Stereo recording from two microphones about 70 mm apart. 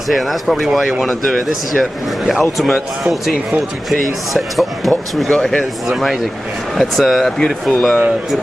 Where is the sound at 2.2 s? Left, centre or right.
Centre.